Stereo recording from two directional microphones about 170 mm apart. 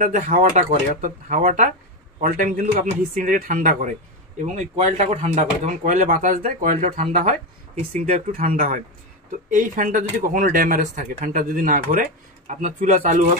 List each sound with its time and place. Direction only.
0.0 s speech: 45° right (ahead or behind)